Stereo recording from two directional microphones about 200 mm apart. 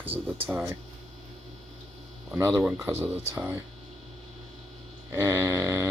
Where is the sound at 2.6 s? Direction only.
10° right (ahead or behind).